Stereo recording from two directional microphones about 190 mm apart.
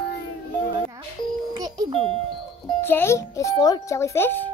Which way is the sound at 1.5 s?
20° right (ahead or behind).